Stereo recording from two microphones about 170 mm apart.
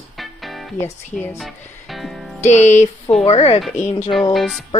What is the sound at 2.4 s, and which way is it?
Music, 45° left (ahead or behind).